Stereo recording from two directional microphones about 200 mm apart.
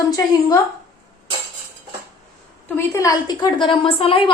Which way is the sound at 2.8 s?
15° left (ahead or behind).